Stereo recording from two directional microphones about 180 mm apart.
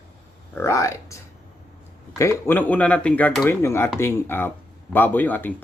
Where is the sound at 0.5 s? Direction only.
15° left (ahead or behind).